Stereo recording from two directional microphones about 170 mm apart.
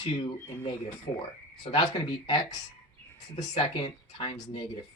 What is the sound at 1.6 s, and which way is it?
Speech, 25° left (ahead or behind).